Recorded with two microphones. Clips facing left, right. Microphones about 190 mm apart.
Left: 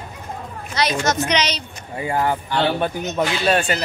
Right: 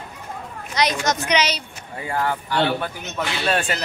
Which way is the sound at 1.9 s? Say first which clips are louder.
Left 3 dB; 20° left (ahead or behind).